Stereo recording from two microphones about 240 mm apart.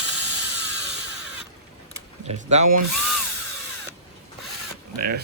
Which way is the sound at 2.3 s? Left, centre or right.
Right.